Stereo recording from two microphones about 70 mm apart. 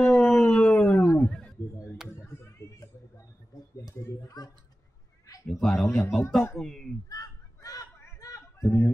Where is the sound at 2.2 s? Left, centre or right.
Left.